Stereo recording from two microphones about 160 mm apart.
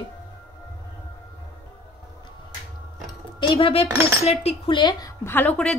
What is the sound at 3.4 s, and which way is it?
Speech, 35° left (ahead or behind).